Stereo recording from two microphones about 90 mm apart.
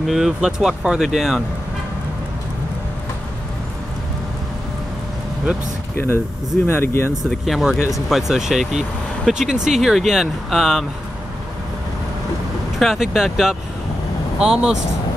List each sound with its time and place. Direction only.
0.0 s speech: 5° right (ahead or behind)
5.9 s speech: 30° left (ahead or behind)
7.2 s speech: centre (ahead or behind)
12.7 s speech: centre (ahead or behind)